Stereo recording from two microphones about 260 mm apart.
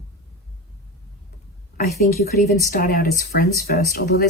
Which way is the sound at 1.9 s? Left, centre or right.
Left.